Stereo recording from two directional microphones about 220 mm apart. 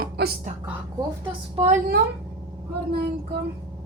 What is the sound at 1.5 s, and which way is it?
Speech, 30° right (ahead or behind).